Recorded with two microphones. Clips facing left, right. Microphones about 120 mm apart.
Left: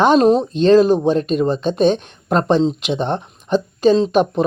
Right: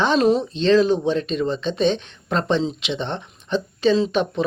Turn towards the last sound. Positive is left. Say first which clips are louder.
# left 5 dB
turn(degrees=45)  # may be behind; listen again after turning